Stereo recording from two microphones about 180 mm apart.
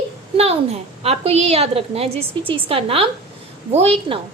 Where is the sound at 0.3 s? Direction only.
35° right (ahead or behind).